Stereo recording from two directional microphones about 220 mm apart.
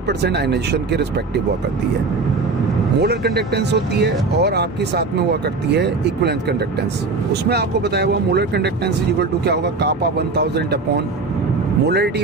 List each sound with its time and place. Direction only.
0.2 s speech: 50° right (ahead or behind)
3.0 s speech: 50° right (ahead or behind)
7.4 s speech: 50° right (ahead or behind)